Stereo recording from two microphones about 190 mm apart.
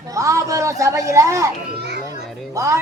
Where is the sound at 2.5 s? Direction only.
15° right (ahead or behind).